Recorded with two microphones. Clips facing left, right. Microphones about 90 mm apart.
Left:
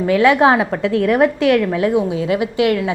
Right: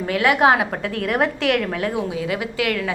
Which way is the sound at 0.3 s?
30° left (ahead or behind).